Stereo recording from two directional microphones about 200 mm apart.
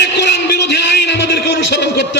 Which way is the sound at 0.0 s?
60° left (ahead or behind).